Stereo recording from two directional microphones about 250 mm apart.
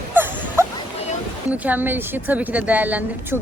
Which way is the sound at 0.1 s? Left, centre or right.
Centre.